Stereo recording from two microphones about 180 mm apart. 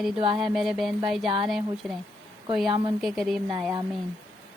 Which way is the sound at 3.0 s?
Centre (ahead or behind).